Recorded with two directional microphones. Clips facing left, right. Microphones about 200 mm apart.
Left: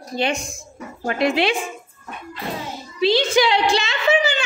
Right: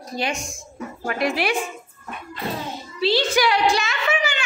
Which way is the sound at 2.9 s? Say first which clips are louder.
Left 3 dB; 20° left (ahead or behind).